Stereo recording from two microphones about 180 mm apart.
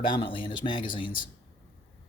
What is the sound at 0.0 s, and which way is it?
Speech, 25° left (ahead or behind).